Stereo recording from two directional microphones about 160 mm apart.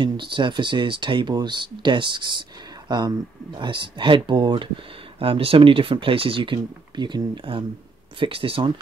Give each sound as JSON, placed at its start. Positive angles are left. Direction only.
{"t": 0.0, "sound": "speech", "side_deg": -30}